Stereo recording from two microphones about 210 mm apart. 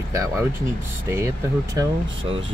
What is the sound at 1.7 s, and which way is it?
Speech, 25° right (ahead or behind).